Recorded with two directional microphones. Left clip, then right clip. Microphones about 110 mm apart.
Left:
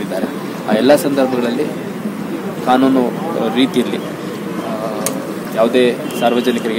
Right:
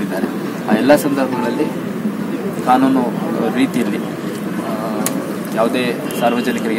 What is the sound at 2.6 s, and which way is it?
Speech, 10° left (ahead or behind).